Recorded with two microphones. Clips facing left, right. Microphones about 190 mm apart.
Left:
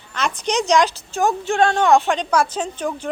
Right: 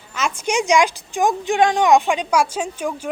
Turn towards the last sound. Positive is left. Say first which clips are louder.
# even
turn(degrees=-10)  # may be behind; listen again after turning